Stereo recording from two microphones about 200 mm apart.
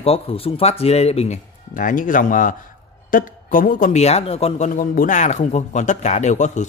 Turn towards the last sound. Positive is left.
turn(degrees=35)  # may be behind; listen again after turning